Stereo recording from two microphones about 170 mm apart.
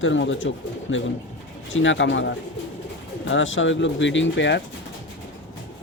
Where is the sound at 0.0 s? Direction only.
90° left.